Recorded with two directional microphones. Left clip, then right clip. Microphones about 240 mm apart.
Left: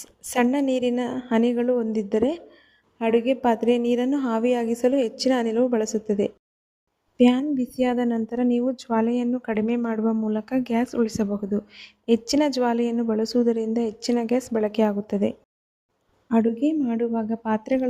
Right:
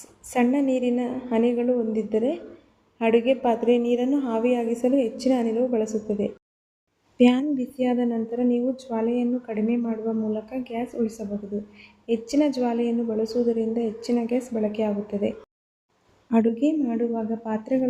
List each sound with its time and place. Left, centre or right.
0.0 s a woman's voice: left
3.0 s a woman's voice: centre
3.2 s a woman's voice: left
7.2 s a woman's voice: centre
7.5 s a woman's voice: left
16.3 s a woman's voice: centre
16.6 s a woman's voice: left